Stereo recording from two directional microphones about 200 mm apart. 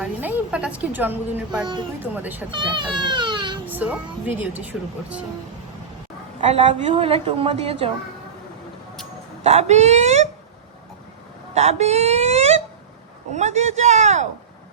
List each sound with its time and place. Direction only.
0.0 s a woman's voice: 5° right (ahead or behind)
2.5 s a woman's voice: 25° right (ahead or behind)
3.7 s a woman's voice: 10° right (ahead or behind)
6.5 s a woman's voice: 30° right (ahead or behind)
9.4 s a man's voice: 30° right (ahead or behind)
11.5 s a man's voice: 30° right (ahead or behind)